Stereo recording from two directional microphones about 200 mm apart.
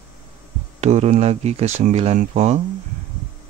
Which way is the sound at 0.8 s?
35° right (ahead or behind).